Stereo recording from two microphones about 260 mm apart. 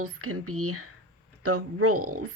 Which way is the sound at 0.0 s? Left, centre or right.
Right.